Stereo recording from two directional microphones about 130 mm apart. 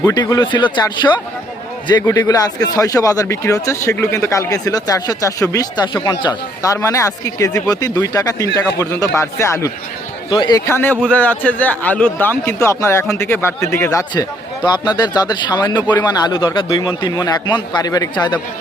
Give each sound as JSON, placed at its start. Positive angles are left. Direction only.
{"t": 0.0, "sound": "a man's voice", "side_deg": 30}
{"t": 10.2, "sound": "a man's voice", "side_deg": 35}
{"t": 10.7, "sound": "a man's voice", "side_deg": 15}
{"t": 14.6, "sound": "a man's voice", "side_deg": 35}